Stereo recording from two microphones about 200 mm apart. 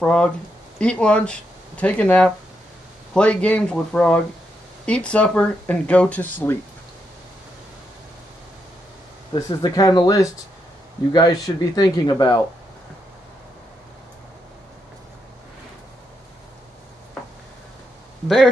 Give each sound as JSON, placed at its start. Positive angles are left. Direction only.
{"t": 0.0, "sound": "speech", "side_deg": 5}
{"t": 9.3, "sound": "speech", "side_deg": 20}